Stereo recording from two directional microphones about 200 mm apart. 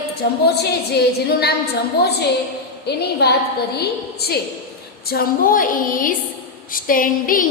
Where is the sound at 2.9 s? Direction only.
55° left (ahead or behind).